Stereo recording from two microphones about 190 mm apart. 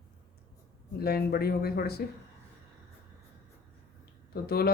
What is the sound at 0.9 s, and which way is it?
Speech, 55° left (ahead or behind).